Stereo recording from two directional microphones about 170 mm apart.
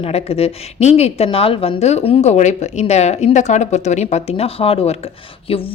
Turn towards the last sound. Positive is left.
turn(degrees=35)  # may be behind; listen again after turning